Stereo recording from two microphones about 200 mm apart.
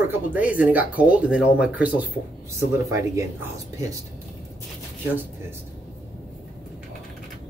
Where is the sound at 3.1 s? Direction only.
15° right (ahead or behind).